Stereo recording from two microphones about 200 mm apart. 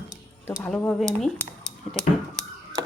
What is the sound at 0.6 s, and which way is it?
Speech, 5° left (ahead or behind).